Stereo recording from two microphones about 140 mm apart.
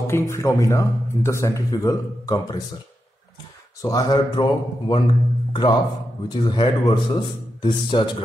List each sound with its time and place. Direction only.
0.0 s speech: 20° left (ahead or behind)
3.8 s a man's voice: 30° left (ahead or behind)